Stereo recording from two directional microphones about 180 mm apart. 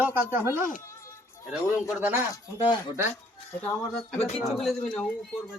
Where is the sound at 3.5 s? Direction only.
10° left (ahead or behind).